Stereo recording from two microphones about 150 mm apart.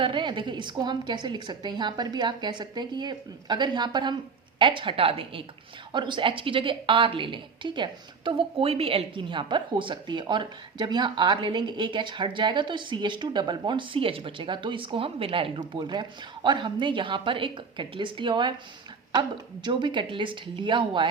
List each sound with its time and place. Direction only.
0.0 s a woman's voice: 30° right (ahead or behind)
19.6 s a woman's voice: 30° right (ahead or behind)